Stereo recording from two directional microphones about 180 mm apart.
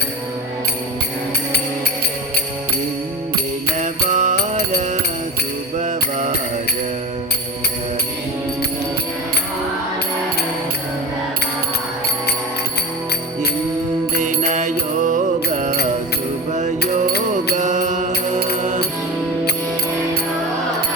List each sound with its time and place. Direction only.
3.8 s music: 40° right (ahead or behind)
14.2 s music: 40° right (ahead or behind)